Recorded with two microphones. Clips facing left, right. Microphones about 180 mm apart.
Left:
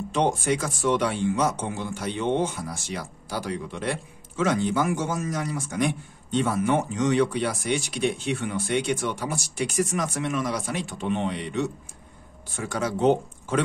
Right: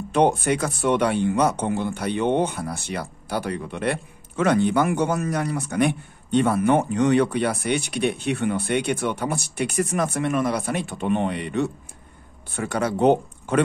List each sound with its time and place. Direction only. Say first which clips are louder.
0.1 s speech: right 5 dB; 60° right (ahead or behind)